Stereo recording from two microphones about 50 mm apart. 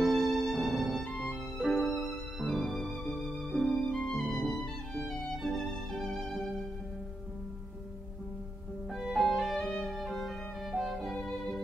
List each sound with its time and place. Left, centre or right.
0.0 s music: centre
8.9 s music: centre